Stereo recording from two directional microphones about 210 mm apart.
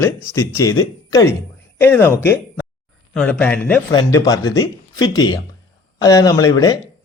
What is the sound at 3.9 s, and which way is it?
Speech, 20° left (ahead or behind).